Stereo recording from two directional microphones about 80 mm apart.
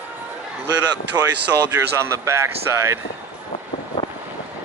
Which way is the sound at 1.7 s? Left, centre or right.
Right.